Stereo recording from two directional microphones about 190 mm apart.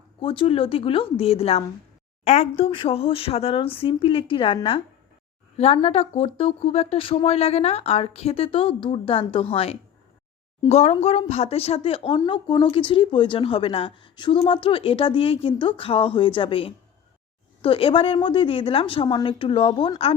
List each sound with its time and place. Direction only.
0.2 s a woman's voice: 30° left (ahead or behind)